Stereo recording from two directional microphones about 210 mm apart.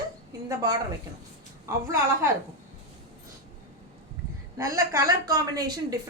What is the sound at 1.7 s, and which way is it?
Speech, 15° right (ahead or behind).